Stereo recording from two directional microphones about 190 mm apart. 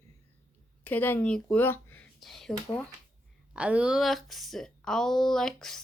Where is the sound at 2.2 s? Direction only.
Centre (ahead or behind).